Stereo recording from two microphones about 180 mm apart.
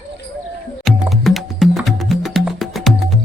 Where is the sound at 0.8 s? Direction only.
Centre (ahead or behind).